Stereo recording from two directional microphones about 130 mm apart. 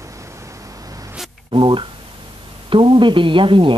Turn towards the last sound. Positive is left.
turn(degrees=-40)  # may be behind; listen again after turning